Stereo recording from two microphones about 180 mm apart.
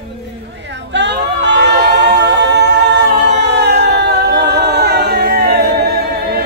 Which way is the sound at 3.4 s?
70° right (ahead or behind).